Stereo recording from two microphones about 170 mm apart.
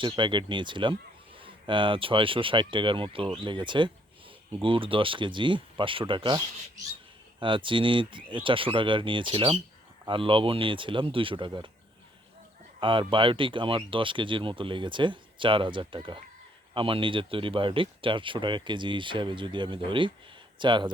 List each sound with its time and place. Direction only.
0.0 s speech: 30° right (ahead or behind)
12.8 s speech: 30° right (ahead or behind)